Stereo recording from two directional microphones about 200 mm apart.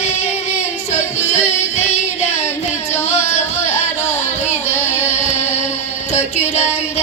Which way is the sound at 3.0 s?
35° left (ahead or behind).